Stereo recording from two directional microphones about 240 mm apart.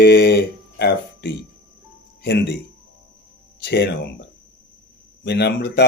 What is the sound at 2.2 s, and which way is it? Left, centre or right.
Speech, left.